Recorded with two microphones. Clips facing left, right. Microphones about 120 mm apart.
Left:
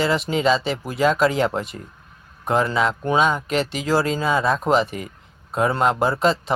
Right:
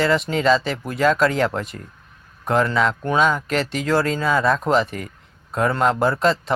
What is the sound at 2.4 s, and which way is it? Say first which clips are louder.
A man's voice: right 1 dB; 10° left (ahead or behind).